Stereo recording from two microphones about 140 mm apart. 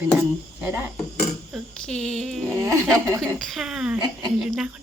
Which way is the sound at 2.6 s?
20° right (ahead or behind).